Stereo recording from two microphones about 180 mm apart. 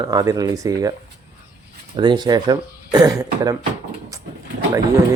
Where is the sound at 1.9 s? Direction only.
25° right (ahead or behind).